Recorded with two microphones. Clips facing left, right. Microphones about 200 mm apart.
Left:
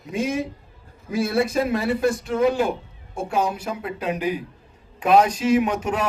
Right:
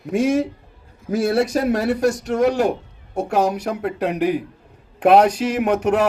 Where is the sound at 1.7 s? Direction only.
75° right (ahead or behind).